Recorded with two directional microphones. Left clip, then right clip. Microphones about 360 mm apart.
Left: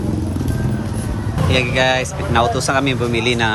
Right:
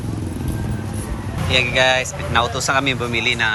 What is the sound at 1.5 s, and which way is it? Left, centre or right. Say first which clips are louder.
Speech: right 1 dB; centre.